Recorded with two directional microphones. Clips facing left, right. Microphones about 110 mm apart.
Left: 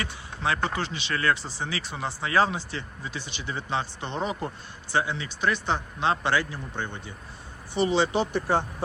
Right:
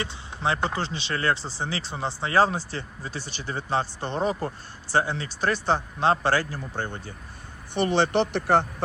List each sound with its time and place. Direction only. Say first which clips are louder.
0.0 s speech: right 2 dB; 30° right (ahead or behind)
7.7 s speech: right 1 dB; 60° right (ahead or behind); by 8.6 s 80° right